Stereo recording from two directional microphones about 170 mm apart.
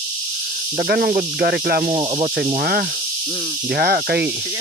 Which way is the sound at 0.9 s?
65° right (ahead or behind).